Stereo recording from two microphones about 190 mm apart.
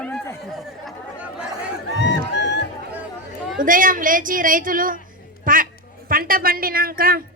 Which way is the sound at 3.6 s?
45° right (ahead or behind).